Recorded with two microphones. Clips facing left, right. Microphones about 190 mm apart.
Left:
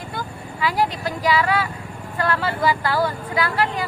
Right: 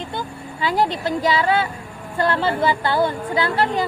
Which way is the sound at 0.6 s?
25° right (ahead or behind).